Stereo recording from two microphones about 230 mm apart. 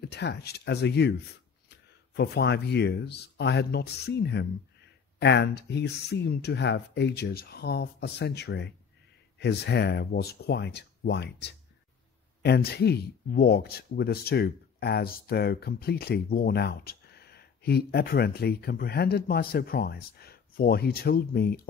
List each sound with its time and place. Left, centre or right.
0.0 s speech: left
2.1 s speech: left